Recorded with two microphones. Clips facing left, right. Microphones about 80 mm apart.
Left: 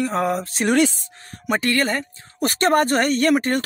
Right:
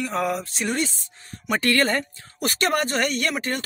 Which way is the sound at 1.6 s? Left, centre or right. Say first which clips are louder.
Right 1 dB; centre.